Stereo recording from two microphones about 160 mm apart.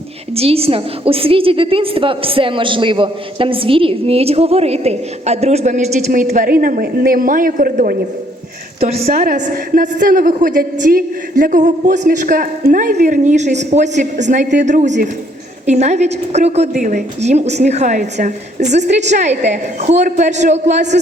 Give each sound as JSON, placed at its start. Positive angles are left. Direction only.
{"t": 0.3, "sound": "a woman's voice", "side_deg": -40}
{"t": 9.0, "sound": "a woman's voice", "side_deg": -65}